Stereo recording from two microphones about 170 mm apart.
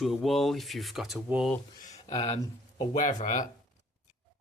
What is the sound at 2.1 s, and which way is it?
Speech, 35° left (ahead or behind).